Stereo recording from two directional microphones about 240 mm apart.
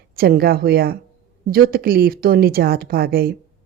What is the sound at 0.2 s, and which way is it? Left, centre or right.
A woman's voice, right.